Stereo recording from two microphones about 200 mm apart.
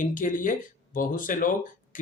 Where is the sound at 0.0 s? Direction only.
40° left (ahead or behind).